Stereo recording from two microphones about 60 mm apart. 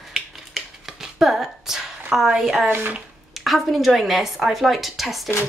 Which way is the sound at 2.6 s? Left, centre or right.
Right.